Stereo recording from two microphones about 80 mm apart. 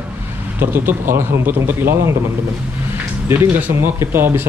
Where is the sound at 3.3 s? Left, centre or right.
Right.